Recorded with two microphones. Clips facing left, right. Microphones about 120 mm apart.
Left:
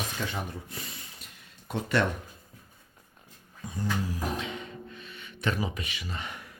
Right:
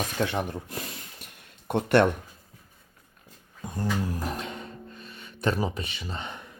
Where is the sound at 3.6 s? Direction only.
55° right (ahead or behind); by 6.5 s 30° right (ahead or behind).